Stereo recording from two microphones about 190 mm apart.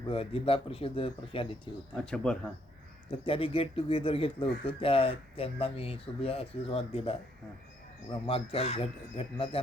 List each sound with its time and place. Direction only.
0.1 s speech: 30° left (ahead or behind)
2.0 s speech: 5° left (ahead or behind)
3.1 s speech: 30° left (ahead or behind)
8.3 s speech: 30° left (ahead or behind)